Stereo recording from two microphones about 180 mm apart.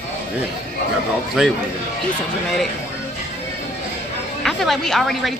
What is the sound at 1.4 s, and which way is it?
Speech, centre (ahead or behind).